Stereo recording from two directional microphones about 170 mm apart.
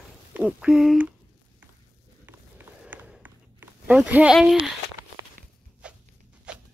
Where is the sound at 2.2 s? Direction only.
10° right (ahead or behind).